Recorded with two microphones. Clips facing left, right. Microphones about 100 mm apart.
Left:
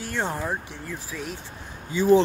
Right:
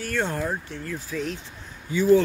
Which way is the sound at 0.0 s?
20° left (ahead or behind).